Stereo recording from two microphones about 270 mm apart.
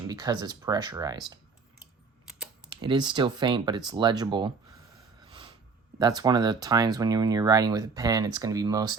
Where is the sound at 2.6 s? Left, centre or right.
Centre.